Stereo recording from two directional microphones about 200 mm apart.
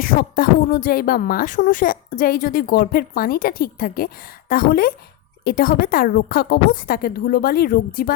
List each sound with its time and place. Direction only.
0.0 s a woman's voice: 45° left (ahead or behind)